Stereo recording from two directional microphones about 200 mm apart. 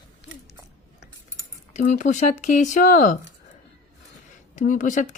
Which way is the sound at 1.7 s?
40° left (ahead or behind).